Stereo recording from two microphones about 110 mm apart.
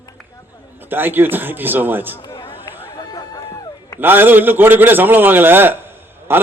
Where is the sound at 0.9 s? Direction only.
20° right (ahead or behind).